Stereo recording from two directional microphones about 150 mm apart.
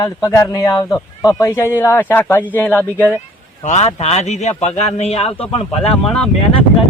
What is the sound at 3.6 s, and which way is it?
A man's voice, 50° left (ahead or behind).